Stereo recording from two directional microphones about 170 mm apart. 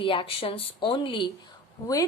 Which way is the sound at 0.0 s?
30° left (ahead or behind).